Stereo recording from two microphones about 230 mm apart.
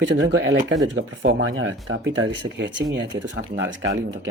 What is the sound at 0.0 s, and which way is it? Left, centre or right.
Speech, right.